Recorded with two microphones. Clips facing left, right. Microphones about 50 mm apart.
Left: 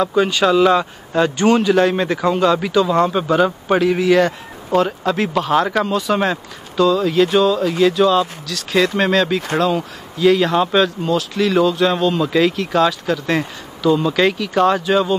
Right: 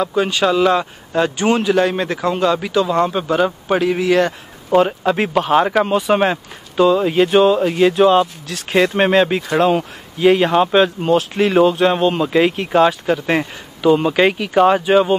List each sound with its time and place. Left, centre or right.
0.0 s a man's voice: centre
4.7 s speech: centre
11.0 s speech: right